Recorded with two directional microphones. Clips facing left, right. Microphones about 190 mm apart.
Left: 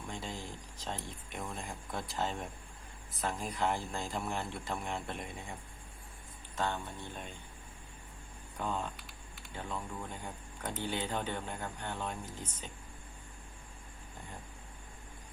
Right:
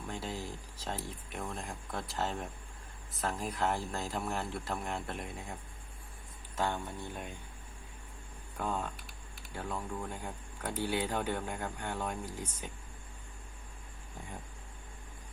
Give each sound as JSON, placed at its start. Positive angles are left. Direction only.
{"t": 0.1, "sound": "speech", "side_deg": -5}
{"t": 6.6, "sound": "speech", "side_deg": -10}
{"t": 8.5, "sound": "speech", "side_deg": -5}